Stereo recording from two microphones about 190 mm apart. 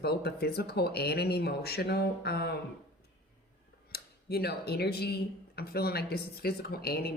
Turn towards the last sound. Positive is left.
turn(degrees=55)  # may be behind; listen again after turning